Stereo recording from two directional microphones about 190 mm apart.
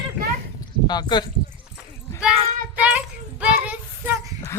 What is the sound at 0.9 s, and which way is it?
Speech, 20° left (ahead or behind).